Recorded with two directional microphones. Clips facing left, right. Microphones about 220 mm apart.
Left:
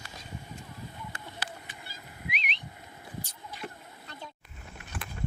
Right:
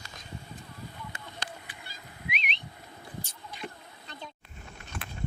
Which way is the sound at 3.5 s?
5° left (ahead or behind).